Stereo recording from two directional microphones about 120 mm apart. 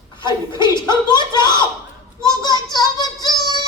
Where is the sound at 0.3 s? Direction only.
40° left (ahead or behind).